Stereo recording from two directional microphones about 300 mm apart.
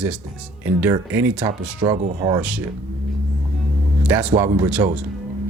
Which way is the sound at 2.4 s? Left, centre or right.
Centre.